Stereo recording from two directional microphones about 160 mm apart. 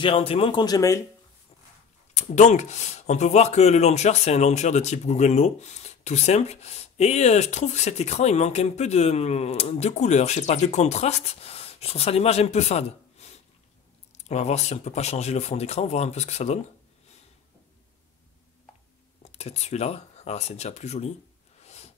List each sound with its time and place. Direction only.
0.0 s speech: 35° left (ahead or behind); by 1.0 s 20° left (ahead or behind)
2.1 s speech: 45° left (ahead or behind)
19.3 s speech: 40° left (ahead or behind)
21.6 s a sound: 40° left (ahead or behind)